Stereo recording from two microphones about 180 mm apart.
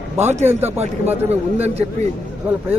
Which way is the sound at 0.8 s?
35° right (ahead or behind).